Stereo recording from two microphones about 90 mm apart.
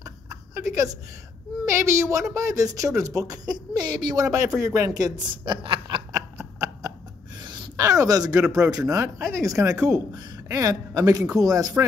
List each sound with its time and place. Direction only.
0.0 s a sound: 35° right (ahead or behind)
1.7 s speech: 30° right (ahead or behind)
3.5 s speech: 55° right (ahead or behind)
5.7 s snicker: 65° right (ahead or behind)
7.4 s a sound: 55° right (ahead or behind)
7.7 s speech: 40° right (ahead or behind)